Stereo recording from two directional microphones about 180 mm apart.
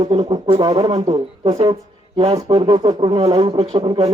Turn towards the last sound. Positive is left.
turn(degrees=-25)  # may be behind; listen again after turning